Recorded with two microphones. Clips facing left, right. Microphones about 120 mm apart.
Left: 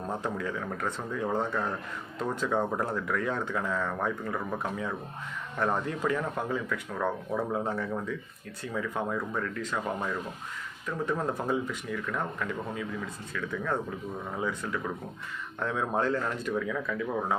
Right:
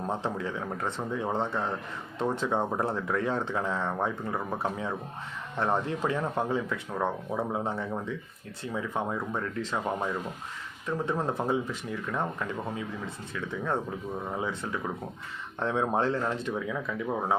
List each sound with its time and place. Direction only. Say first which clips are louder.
0.2 s speech: even; 25° right (ahead or behind)
10.8 s speech: right 1 dB; 25° right (ahead or behind)
14.3 s speech: left 3 dB; 25° right (ahead or behind)